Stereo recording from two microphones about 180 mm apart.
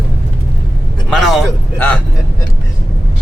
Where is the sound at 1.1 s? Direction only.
Centre (ahead or behind).